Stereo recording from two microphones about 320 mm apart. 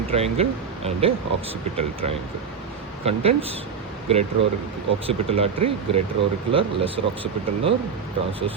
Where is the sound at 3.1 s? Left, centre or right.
Centre.